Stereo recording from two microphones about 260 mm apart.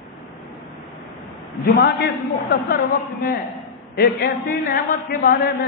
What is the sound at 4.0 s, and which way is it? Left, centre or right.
A man's voice, left.